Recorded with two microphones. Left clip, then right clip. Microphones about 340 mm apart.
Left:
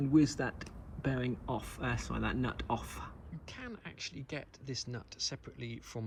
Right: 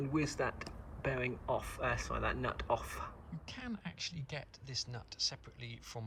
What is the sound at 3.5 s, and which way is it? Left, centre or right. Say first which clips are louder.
Speech: even; centre.